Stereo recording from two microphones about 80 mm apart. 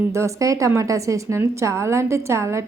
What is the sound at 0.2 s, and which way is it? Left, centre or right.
A woman's voice, right.